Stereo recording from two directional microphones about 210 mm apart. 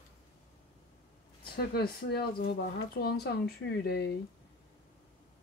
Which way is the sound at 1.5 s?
45° left (ahead or behind).